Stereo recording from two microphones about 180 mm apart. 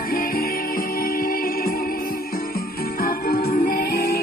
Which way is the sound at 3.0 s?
55° left (ahead or behind).